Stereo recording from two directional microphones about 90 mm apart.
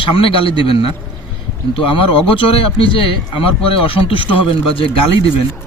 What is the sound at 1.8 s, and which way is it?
A man's voice, 80° left.